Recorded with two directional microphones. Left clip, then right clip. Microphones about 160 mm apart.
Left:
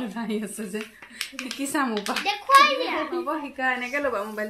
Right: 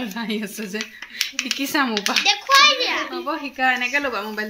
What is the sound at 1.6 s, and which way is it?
Speech, 50° right (ahead or behind).